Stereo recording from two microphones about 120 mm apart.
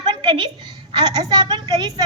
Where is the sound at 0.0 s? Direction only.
40° right (ahead or behind).